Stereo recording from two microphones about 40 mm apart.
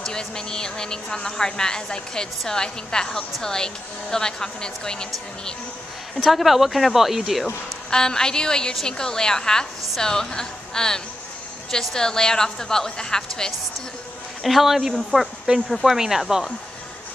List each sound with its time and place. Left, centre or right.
0.0 s a woman's voice: centre
6.1 s speech: centre
7.9 s a woman's voice: centre
14.4 s speech: centre
15.0 s speech: centre
15.7 s speech: centre